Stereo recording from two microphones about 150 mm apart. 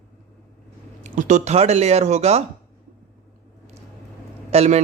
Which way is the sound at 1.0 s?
55° right (ahead or behind).